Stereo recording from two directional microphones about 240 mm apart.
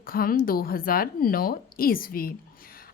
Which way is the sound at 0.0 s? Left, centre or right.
Left.